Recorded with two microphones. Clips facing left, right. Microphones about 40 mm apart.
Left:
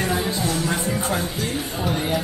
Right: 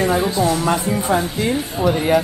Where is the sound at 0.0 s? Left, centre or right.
Centre.